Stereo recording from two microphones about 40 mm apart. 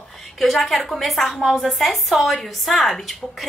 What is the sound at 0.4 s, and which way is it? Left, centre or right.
A woman's voice, centre.